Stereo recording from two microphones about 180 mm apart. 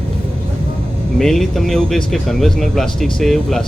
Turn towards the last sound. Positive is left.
turn(degrees=0)  # may be behind; listen again after turning